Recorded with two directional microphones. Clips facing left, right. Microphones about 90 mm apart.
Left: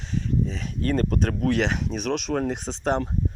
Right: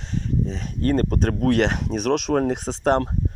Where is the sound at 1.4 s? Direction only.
50° right (ahead or behind).